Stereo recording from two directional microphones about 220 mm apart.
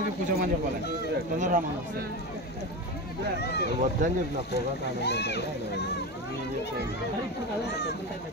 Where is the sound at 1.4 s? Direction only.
35° right (ahead or behind).